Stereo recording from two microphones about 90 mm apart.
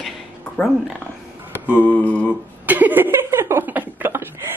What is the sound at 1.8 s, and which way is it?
Mantra, 20° left (ahead or behind).